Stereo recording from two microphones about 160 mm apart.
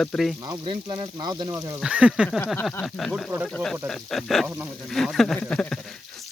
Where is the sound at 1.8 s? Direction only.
5° right (ahead or behind).